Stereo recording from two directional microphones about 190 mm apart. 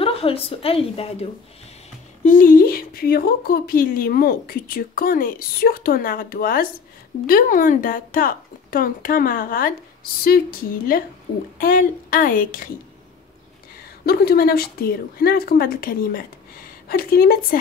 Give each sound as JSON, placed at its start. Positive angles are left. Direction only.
{"t": 0.0, "sound": "a woman's voice", "side_deg": 30}
{"t": 2.2, "sound": "a woman's voice", "side_deg": 45}
{"t": 14.0, "sound": "a woman's voice", "side_deg": 55}